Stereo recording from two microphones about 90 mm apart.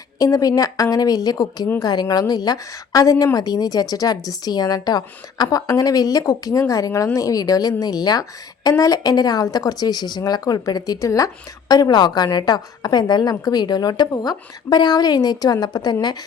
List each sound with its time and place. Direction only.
0.2 s speech: 40° left (ahead or behind)